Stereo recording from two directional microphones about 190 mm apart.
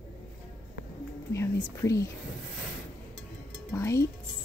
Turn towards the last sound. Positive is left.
turn(degrees=15)  # may be behind; listen again after turning